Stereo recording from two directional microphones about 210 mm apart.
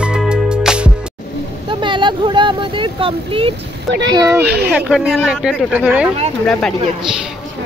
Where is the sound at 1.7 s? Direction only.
20° right (ahead or behind).